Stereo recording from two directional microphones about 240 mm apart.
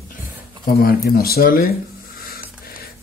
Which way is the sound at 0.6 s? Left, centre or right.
Left.